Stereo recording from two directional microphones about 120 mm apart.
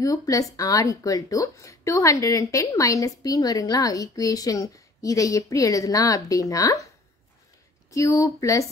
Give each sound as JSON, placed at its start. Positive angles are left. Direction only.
{"t": 0.0, "sound": "a woman's voice", "side_deg": 30}
{"t": 7.9, "sound": "a woman's voice", "side_deg": 25}